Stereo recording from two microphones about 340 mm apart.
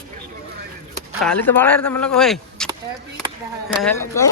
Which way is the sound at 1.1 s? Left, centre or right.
Centre.